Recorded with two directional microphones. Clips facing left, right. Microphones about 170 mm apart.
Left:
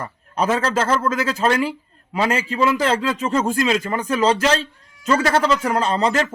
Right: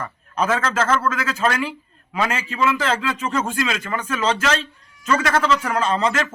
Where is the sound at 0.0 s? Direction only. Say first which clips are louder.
Left 1 dB; 35° left (ahead or behind).